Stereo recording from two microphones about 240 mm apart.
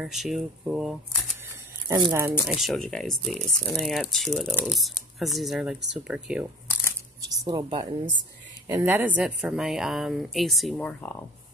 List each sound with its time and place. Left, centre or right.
0.0 s speech: centre
1.9 s speech: centre
2.1 s speech: centre
7.2 s a woman's voice: centre